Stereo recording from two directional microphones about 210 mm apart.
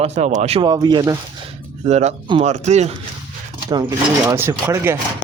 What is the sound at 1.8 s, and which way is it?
Speech, 35° right (ahead or behind).